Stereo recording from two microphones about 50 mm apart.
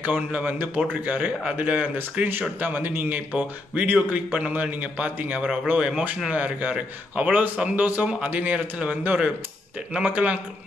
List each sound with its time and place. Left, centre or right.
0.0 s a man's voice: right
5.8 s speech: centre
6.2 s a man's voice: right
10.0 s a man's voice: right